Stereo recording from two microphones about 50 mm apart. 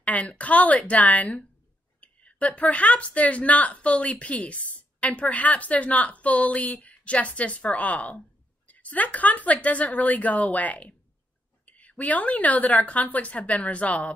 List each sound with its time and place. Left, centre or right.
0.0 s a woman's voice: left